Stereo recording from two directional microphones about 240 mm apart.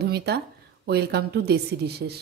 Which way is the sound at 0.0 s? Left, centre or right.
Right.